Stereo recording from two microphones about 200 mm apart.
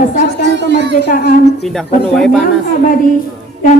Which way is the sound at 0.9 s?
55° left (ahead or behind).